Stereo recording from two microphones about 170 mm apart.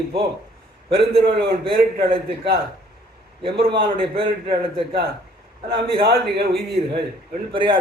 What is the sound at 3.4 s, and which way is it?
A man's voice, 30° right (ahead or behind).